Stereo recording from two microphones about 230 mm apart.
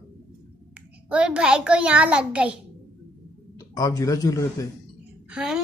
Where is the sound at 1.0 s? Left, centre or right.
Centre.